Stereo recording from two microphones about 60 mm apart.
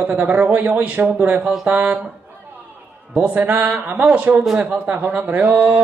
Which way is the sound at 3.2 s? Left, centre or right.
Right.